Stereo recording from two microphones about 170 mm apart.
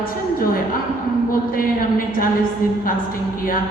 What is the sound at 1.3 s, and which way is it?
A man's voice, 55° left (ahead or behind).